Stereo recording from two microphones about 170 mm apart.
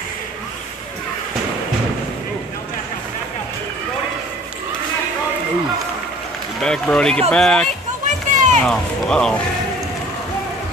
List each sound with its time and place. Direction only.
6.6 s speech: 5° left (ahead or behind)
8.3 s a sound: 45° right (ahead or behind)
8.6 s speech: 5° left (ahead or behind)